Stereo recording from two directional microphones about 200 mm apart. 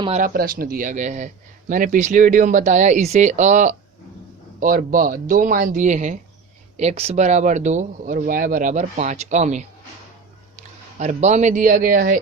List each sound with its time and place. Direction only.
0.2 s a man's voice: 45° right (ahead or behind)